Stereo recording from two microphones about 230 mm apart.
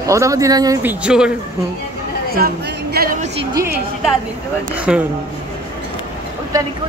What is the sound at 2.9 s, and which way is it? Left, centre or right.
Speech, right.